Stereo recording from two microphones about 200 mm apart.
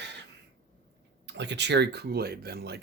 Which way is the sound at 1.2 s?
60° right (ahead or behind).